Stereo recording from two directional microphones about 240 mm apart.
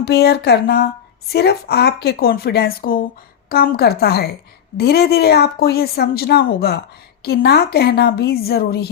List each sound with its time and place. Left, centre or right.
0.0 s speech: left